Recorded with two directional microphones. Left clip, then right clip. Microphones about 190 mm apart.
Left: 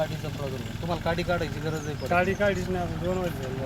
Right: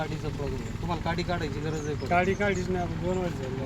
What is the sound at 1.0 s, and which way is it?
Speech, 25° left (ahead or behind).